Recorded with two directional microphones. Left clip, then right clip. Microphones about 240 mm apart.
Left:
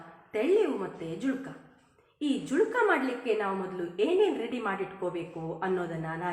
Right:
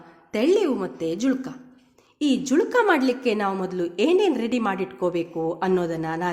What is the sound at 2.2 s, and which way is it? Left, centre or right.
A woman's voice, right.